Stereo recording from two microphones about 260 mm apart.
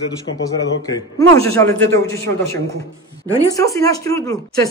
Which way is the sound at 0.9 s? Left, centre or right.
Centre.